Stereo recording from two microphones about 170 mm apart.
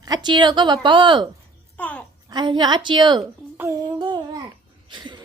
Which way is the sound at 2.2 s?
25° right (ahead or behind).